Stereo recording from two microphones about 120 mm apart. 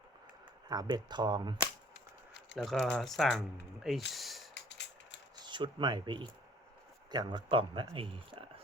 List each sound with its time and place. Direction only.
0.7 s speech: 35° right (ahead or behind)
2.6 s speech: centre (ahead or behind)
5.5 s speech: 40° right (ahead or behind)